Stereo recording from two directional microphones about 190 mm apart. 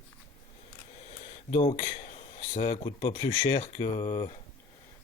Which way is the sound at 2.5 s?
30° left (ahead or behind).